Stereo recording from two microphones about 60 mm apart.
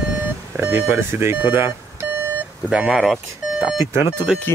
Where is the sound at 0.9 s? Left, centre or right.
Right.